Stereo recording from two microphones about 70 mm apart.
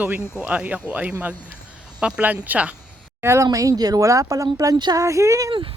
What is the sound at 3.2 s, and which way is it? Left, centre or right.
Speech, right.